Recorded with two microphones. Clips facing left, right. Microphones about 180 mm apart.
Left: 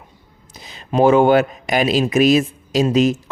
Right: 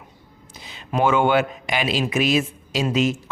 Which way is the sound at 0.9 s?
35° left (ahead or behind).